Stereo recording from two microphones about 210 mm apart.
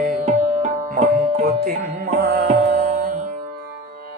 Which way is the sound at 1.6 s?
45° right (ahead or behind).